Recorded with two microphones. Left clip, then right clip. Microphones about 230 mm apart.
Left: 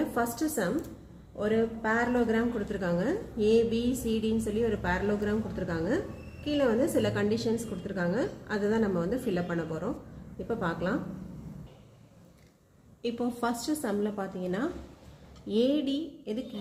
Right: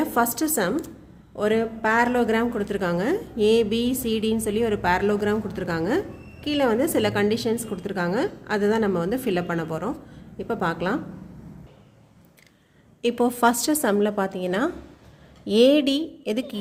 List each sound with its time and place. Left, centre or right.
0.1 s a woman's voice: right
13.0 s a woman's voice: right